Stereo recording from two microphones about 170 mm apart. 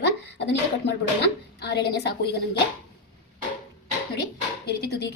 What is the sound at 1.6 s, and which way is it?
Speech, 75° left (ahead or behind).